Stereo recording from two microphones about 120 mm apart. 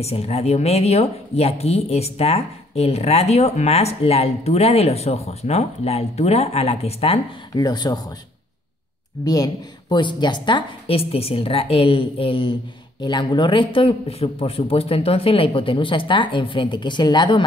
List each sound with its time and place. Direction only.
0.0 s speech: 60° left (ahead or behind)
7.5 s speech: 35° left (ahead or behind)
9.2 s a man's voice: 30° left (ahead or behind)